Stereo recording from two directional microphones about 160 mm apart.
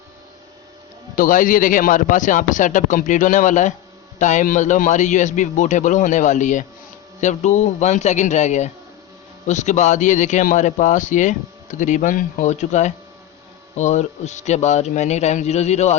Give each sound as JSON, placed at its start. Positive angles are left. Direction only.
{"t": 1.1, "sound": "a man's voice", "side_deg": 55}